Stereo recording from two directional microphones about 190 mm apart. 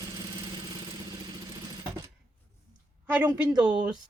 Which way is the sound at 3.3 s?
20° right (ahead or behind).